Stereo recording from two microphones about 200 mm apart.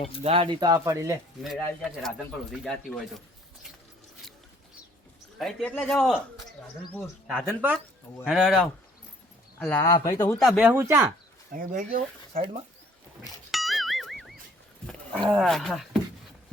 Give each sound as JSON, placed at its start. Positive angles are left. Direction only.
{"t": 0.2, "sound": "speech", "side_deg": -30}
{"t": 1.4, "sound": "a man's voice", "side_deg": 0}
{"t": 5.4, "sound": "a man's voice", "side_deg": 0}
{"t": 9.8, "sound": "speech", "side_deg": 20}
{"t": 10.3, "sound": "speech", "side_deg": 0}
{"t": 11.5, "sound": "speech", "side_deg": -40}
{"t": 13.2, "sound": "a sound", "side_deg": 0}
{"t": 14.8, "sound": "roaring cats", "side_deg": 5}
{"t": 15.3, "sound": "a man's voice", "side_deg": 0}